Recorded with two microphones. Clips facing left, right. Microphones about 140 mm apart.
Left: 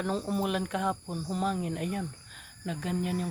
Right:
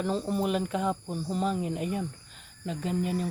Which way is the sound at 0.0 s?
Centre (ahead or behind).